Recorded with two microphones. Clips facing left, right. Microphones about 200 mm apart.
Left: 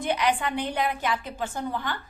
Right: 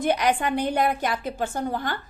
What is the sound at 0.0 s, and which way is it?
A woman's voice, 45° right (ahead or behind).